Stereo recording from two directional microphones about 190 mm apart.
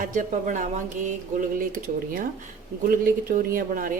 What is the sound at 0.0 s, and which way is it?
Speech, 45° right (ahead or behind).